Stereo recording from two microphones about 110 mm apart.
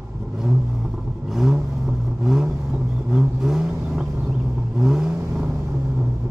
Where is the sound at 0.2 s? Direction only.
5° right (ahead or behind).